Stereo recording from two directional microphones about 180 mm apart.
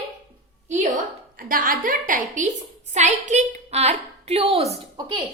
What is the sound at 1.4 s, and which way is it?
A woman's voice, 50° right (ahead or behind).